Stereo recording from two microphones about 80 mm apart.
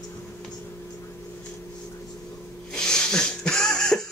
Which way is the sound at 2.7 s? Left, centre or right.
Centre.